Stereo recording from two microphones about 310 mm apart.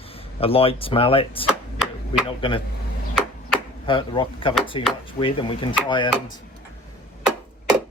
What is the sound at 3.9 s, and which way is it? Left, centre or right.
Speech, centre.